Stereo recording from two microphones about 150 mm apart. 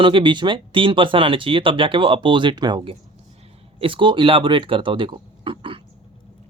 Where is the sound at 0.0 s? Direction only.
35° right (ahead or behind).